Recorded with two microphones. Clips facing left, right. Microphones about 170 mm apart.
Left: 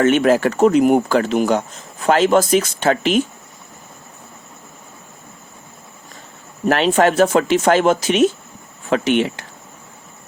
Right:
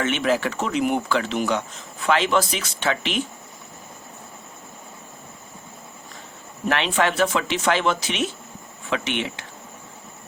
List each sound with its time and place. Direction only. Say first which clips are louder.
0.0 s speech: left 8 dB; 45° left (ahead or behind)
6.7 s speech: left 7 dB; 40° left (ahead or behind)